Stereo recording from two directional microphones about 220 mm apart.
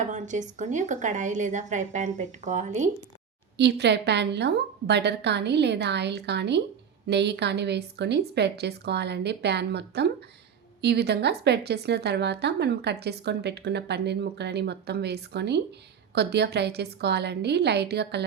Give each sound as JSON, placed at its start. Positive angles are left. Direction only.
{"t": 0.1, "sound": "a woman's voice", "side_deg": -35}
{"t": 3.6, "sound": "a woman's voice", "side_deg": -50}